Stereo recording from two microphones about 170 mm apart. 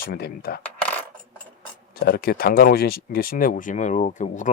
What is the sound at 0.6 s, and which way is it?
Coin, 10° left (ahead or behind).